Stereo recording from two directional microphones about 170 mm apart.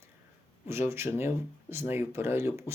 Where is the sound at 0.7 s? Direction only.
15° right (ahead or behind).